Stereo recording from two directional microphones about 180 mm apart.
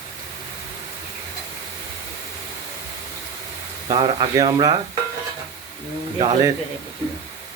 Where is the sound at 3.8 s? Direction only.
25° right (ahead or behind).